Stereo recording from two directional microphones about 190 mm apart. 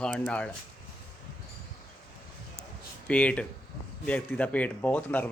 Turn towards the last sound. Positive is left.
turn(degrees=10)  # may be behind; listen again after turning